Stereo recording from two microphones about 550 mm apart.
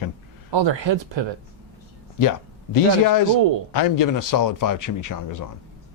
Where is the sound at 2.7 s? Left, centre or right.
Left.